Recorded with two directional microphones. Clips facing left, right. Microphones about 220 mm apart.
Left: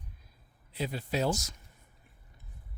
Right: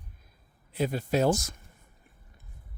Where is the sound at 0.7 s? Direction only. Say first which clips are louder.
Right 6 dB; 50° right (ahead or behind).